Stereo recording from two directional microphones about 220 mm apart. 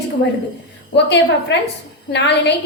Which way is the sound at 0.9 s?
50° left (ahead or behind).